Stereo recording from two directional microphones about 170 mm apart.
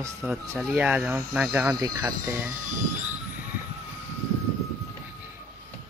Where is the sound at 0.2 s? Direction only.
10° right (ahead or behind).